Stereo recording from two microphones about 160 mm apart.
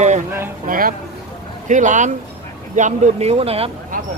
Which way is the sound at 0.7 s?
60° right (ahead or behind).